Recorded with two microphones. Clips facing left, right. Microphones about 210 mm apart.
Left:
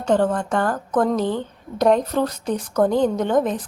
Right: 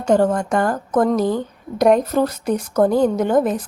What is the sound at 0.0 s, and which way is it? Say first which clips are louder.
A woman's voice: right 3 dB; 10° right (ahead or behind).